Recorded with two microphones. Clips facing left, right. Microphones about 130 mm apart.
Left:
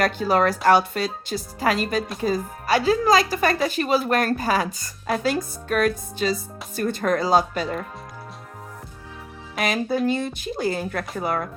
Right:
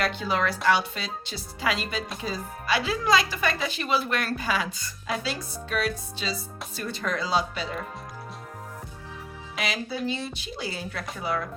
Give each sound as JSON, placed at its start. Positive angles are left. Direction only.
{"t": 0.0, "sound": "a woman's voice", "side_deg": 45}
{"t": 9.6, "sound": "a woman's voice", "side_deg": 50}